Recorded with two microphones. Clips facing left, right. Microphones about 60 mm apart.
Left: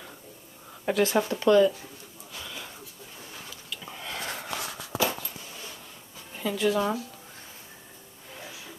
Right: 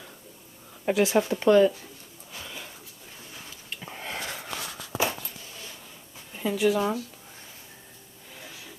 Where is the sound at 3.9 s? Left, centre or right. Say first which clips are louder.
Right 2 dB; right.